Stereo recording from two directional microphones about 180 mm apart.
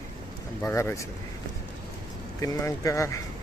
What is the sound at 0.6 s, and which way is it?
Speech, 15° left (ahead or behind).